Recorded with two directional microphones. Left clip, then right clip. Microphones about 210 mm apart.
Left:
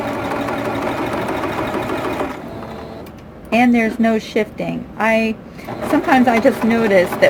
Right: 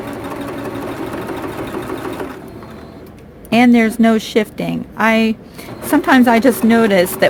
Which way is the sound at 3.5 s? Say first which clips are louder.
Right 2 dB; 45° right (ahead or behind).